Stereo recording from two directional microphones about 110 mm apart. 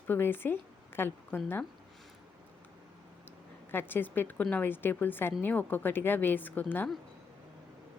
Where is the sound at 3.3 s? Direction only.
20° left (ahead or behind).